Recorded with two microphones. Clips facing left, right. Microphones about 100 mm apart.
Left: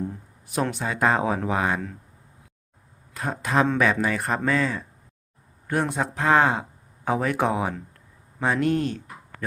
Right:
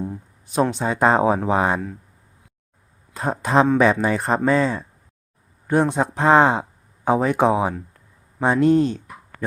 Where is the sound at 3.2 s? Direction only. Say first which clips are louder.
Right 5 dB; 30° right (ahead or behind).